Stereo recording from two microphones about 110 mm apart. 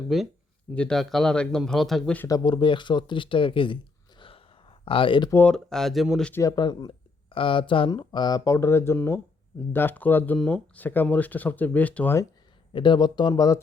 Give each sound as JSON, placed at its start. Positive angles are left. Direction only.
{"t": 0.1, "sound": "speech", "side_deg": 0}
{"t": 2.2, "sound": "speech", "side_deg": 40}
{"t": 4.2, "sound": "a sound", "side_deg": 55}
{"t": 5.5, "sound": "speech", "side_deg": 5}
{"t": 6.6, "sound": "a sound", "side_deg": 40}
{"t": 7.3, "sound": "speech", "side_deg": 55}
{"t": 7.9, "sound": "speech", "side_deg": 40}
{"t": 8.5, "sound": "speech", "side_deg": 25}
{"t": 12.7, "sound": "speech", "side_deg": 45}